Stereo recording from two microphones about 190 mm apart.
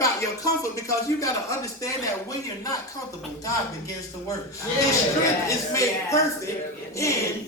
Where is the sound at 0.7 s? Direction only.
15° left (ahead or behind).